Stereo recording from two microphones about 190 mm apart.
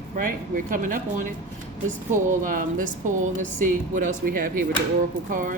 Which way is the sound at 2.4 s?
45° right (ahead or behind).